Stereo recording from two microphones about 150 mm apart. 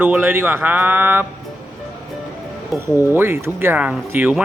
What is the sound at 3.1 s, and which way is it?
Speech, 15° right (ahead or behind).